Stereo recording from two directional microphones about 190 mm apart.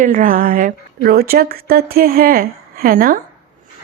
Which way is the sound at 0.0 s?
45° right (ahead or behind).